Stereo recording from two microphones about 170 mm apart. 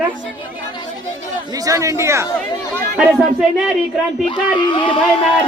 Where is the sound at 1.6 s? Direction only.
20° right (ahead or behind).